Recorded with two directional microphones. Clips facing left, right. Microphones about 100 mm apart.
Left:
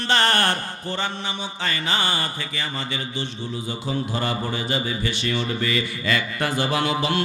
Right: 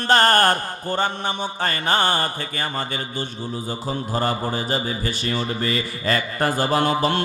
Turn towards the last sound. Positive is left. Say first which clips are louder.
# right 3 dB
turn(degrees=-45)  # may be behind; listen again after turning